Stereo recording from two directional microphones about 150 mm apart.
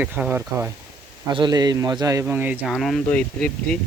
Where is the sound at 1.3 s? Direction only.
30° right (ahead or behind).